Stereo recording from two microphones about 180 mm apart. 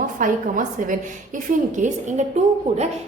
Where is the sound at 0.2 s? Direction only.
45° right (ahead or behind).